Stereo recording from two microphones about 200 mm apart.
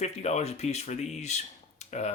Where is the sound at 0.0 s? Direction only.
35° left (ahead or behind).